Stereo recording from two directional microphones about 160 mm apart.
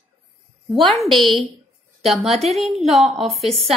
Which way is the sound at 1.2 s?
30° right (ahead or behind).